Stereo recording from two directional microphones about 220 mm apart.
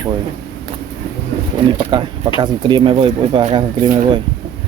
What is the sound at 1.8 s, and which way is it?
Speech, 20° right (ahead or behind).